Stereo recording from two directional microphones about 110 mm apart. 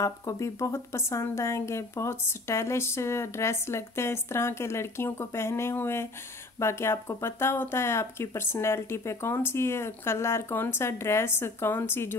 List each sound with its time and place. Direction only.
0.0 s speech: 30° left (ahead or behind)